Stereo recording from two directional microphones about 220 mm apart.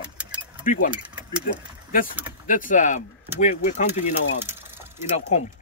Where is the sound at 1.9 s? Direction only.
40° left (ahead or behind).